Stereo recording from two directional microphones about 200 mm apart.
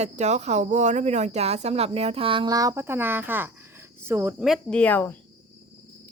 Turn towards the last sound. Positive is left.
turn(degrees=10)  # may be behind; listen again after turning